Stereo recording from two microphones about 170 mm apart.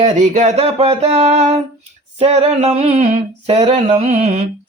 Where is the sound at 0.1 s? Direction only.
45° right (ahead or behind).